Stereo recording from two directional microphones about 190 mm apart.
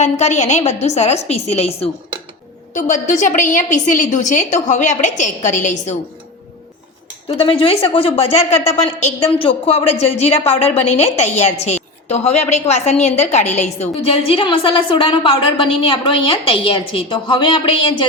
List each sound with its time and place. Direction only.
0.0 s a woman's voice: 35° left (ahead or behind)
7.3 s a woman's voice: 30° left (ahead or behind)